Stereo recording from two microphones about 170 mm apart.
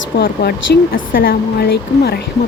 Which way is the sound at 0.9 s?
55° left (ahead or behind).